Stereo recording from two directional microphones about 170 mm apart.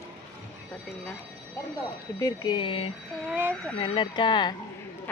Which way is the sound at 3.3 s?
10° right (ahead or behind).